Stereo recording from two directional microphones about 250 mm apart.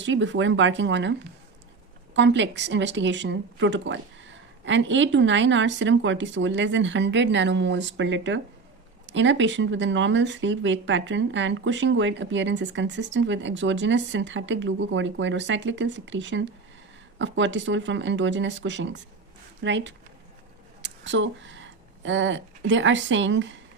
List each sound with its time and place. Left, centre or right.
0.0 s speech: right
2.1 s speech: right